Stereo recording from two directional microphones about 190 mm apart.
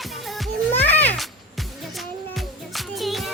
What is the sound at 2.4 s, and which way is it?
Music, centre (ahead or behind).